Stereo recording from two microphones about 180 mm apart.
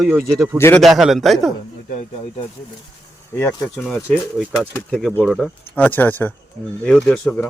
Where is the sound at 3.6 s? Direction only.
5° left (ahead or behind).